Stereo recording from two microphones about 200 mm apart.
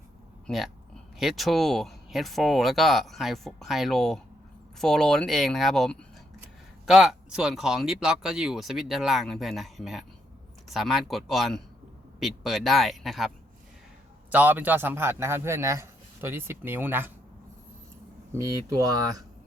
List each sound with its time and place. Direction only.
0.4 s a man's voice: centre (ahead or behind)
18.3 s speech: 15° right (ahead or behind)